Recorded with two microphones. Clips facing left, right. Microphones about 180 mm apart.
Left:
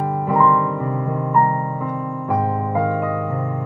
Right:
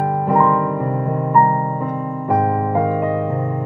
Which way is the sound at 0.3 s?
50° right (ahead or behind).